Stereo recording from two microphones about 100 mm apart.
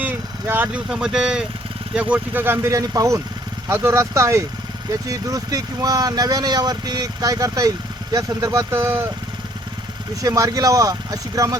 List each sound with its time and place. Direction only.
0.0 s speech: 20° right (ahead or behind)
2.7 s speech: 35° right (ahead or behind)
10.2 s speech: 35° right (ahead or behind)